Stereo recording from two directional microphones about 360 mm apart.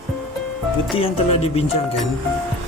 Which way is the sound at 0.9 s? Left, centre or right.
Centre.